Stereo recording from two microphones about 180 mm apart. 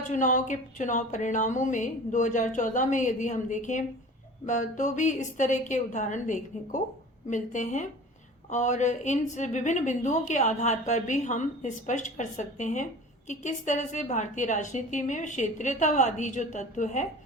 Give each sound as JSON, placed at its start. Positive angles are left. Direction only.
{"t": 0.1, "sound": "a woman's voice", "side_deg": 45}